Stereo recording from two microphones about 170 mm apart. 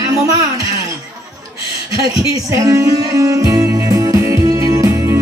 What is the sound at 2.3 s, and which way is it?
Speech, 20° right (ahead or behind).